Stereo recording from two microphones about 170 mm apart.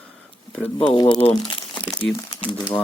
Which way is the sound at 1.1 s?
25° left (ahead or behind).